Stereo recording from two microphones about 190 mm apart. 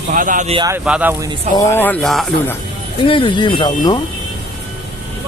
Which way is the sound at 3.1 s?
25° left (ahead or behind).